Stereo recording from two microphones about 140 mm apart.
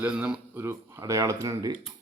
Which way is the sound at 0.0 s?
10° right (ahead or behind).